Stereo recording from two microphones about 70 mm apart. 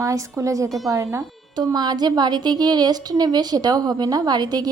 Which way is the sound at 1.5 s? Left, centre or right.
Right.